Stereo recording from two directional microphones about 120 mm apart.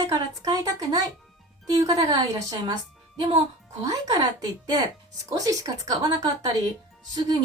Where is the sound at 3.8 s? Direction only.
30° right (ahead or behind).